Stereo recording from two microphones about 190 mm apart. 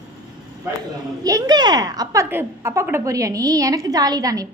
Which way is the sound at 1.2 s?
20° right (ahead or behind).